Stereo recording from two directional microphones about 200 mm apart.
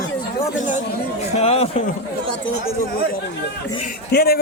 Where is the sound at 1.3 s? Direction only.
30° left (ahead or behind).